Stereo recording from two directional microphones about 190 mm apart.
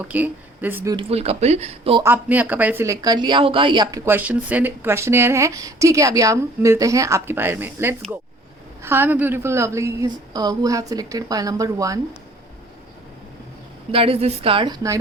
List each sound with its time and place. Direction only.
0.0 s speech: 10° right (ahead or behind)
0.9 s speech: 30° right (ahead or behind)
2.0 s speech: 10° right (ahead or behind); by 4.0 s 25° right (ahead or behind)
4.0 s speech: 10° right (ahead or behind)
13.9 s a woman's voice: 30° right (ahead or behind)